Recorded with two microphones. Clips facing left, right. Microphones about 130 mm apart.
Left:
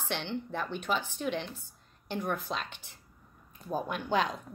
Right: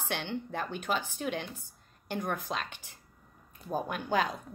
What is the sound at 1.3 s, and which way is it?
Speech, 10° right (ahead or behind).